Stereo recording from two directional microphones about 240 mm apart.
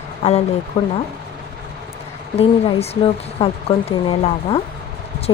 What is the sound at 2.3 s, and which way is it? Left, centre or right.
A woman's voice, left.